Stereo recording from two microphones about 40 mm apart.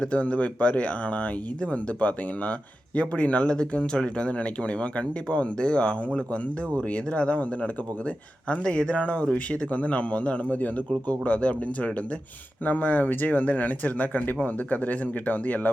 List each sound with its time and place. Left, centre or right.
0.1 s speech: left